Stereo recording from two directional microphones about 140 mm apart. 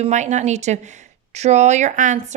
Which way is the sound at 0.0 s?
55° right (ahead or behind).